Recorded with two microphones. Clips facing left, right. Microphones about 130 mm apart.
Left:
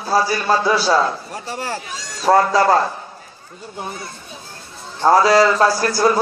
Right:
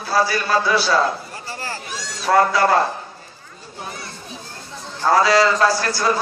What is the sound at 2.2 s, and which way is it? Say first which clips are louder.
Speech: left 2 dB; 35° left (ahead or behind).